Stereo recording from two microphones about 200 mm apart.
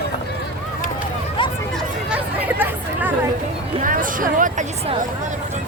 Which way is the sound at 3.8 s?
45° right (ahead or behind).